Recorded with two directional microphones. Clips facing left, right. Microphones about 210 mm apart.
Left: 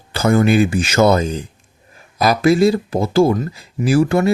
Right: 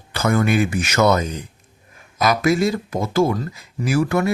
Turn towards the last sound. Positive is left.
turn(degrees=30)  # may be behind; listen again after turning